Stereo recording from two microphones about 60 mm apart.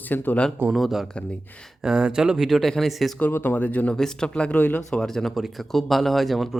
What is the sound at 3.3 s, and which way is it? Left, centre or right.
Speech, left.